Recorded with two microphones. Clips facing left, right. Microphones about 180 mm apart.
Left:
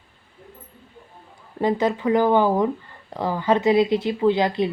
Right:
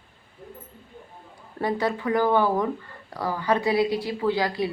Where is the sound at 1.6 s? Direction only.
20° left (ahead or behind).